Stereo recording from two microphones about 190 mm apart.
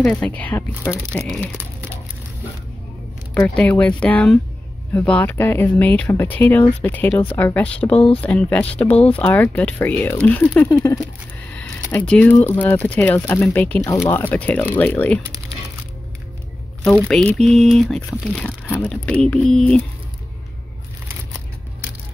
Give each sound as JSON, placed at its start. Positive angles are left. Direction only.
{"t": 0.0, "sound": "speech", "side_deg": 5}
{"t": 3.3, "sound": "speech", "side_deg": 10}
{"t": 7.9, "sound": "speech", "side_deg": 30}
{"t": 8.2, "sound": "speech", "side_deg": 5}
{"t": 11.5, "sound": "a sound", "side_deg": 5}
{"t": 12.4, "sound": "speech", "side_deg": 10}
{"t": 17.1, "sound": "speech", "side_deg": 5}